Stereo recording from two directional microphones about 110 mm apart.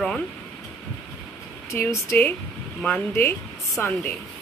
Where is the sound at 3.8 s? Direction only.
20° left (ahead or behind).